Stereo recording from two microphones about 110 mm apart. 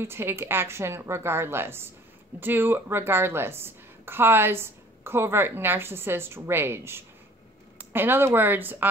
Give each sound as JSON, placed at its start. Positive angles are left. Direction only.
{"t": 0.0, "sound": "a woman's voice", "side_deg": -20}